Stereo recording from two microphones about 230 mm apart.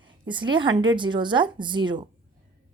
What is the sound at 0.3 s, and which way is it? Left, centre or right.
Speech, right.